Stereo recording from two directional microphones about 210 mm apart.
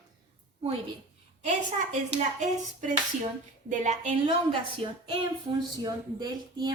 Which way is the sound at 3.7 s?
35° right (ahead or behind).